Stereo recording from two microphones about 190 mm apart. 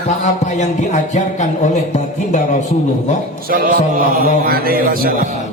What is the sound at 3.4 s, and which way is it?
A man's voice, 50° right (ahead or behind).